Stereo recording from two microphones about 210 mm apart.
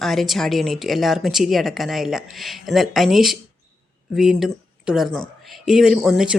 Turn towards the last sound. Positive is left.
turn(degrees=0)  # may be behind; listen again after turning